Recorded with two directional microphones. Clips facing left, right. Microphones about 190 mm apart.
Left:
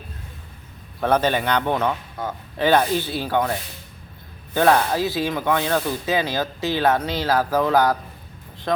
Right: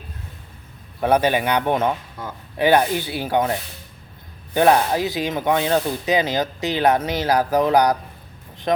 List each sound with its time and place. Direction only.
1.0 s speech: 15° right (ahead or behind)
4.5 s speech: 15° right (ahead or behind)